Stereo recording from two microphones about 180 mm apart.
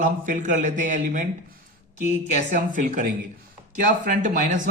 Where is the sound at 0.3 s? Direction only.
45° right (ahead or behind).